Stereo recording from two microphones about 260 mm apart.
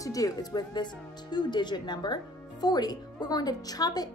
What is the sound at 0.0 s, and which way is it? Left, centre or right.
Speech, centre.